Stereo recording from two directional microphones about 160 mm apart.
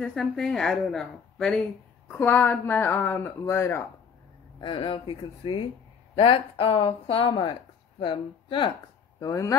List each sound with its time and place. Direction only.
0.0 s a woman's voice: 5° left (ahead or behind)
4.6 s speech: 30° left (ahead or behind)
9.2 s speech: 20° left (ahead or behind)